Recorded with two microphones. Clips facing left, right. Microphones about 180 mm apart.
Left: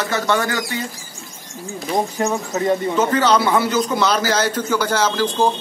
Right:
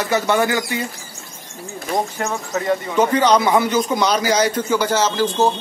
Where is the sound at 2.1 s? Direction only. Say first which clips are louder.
Left 2 dB; 15° left (ahead or behind).